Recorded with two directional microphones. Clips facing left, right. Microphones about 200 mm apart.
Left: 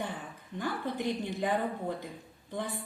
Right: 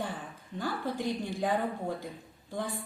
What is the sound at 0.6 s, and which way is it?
Speech, 20° left (ahead or behind).